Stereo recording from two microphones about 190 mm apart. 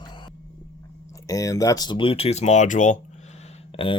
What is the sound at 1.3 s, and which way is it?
Speech, 15° left (ahead or behind).